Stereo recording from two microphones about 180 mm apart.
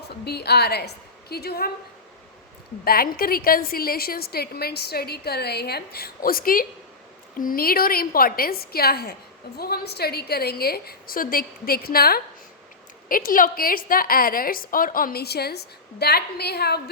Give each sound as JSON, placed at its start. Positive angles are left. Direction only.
{"t": 0.1, "sound": "a woman's voice", "side_deg": 65}
{"t": 2.8, "sound": "a woman's voice", "side_deg": 55}